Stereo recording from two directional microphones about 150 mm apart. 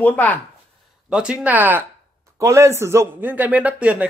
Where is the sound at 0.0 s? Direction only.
10° left (ahead or behind).